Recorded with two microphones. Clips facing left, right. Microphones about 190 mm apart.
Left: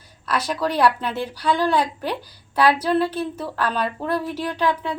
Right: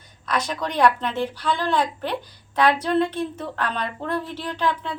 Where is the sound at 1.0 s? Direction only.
10° left (ahead or behind).